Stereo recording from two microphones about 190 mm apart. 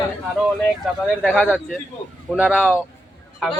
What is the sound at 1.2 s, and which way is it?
A man's voice, 5° right (ahead or behind).